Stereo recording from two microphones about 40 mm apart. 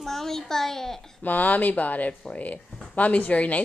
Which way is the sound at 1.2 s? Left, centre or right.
Left.